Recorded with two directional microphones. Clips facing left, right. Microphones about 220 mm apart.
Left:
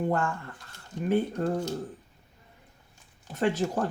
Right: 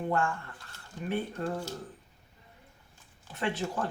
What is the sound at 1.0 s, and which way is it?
Speech, 40° left (ahead or behind).